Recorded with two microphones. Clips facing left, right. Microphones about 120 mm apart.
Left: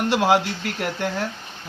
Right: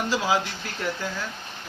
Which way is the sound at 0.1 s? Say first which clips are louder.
Left 7 dB; 65° left (ahead or behind).